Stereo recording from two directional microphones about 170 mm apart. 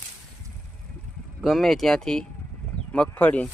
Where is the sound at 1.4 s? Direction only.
Centre (ahead or behind).